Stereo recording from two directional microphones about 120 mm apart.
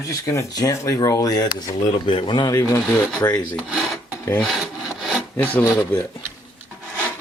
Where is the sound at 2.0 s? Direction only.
45° left (ahead or behind).